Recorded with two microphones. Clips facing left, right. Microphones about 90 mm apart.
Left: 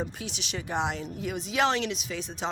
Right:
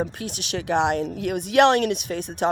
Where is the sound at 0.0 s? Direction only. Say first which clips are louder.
Right 6 dB; 55° right (ahead or behind).